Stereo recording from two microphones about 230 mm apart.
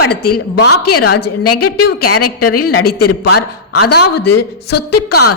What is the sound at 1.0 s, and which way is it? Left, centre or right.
Speech, left.